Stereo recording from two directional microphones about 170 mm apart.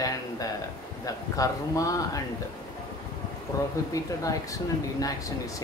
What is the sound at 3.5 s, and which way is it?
Speech, 20° left (ahead or behind).